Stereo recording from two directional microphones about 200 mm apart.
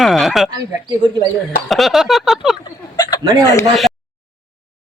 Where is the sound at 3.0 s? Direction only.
20° left (ahead or behind).